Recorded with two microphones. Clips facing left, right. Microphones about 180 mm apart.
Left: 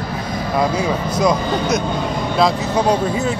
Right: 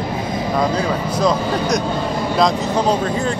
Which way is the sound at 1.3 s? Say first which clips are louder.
Even; 5° right (ahead or behind).